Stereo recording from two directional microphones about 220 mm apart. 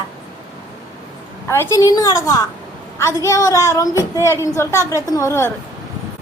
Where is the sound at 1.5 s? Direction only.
10° left (ahead or behind).